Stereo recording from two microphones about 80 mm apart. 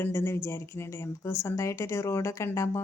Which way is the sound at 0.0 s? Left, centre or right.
Left.